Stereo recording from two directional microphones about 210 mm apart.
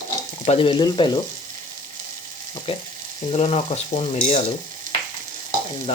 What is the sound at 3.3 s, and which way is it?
Stir, 30° left (ahead or behind).